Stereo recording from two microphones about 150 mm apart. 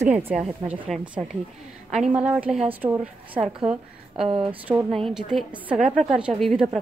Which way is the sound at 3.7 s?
50° right (ahead or behind).